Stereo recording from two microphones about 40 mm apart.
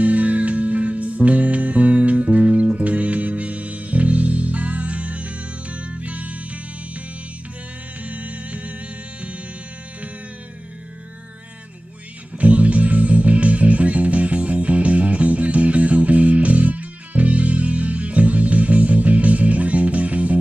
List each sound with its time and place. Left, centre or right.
0.0 s music: right
8.0 s music: right
12.4 s music: right